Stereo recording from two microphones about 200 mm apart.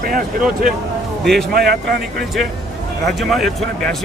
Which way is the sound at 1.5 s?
50° right (ahead or behind).